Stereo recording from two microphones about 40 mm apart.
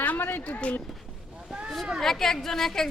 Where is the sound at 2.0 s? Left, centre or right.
Centre.